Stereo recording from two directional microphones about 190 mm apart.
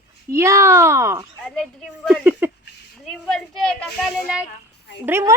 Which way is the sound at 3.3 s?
Centre (ahead or behind).